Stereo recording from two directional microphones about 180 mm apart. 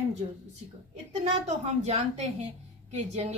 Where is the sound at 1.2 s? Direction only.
40° right (ahead or behind).